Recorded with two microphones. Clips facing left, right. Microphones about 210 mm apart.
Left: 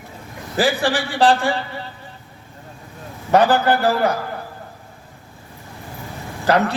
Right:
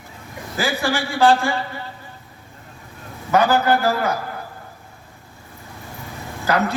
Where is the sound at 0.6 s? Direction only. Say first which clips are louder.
Left 3 dB; 35° left (ahead or behind).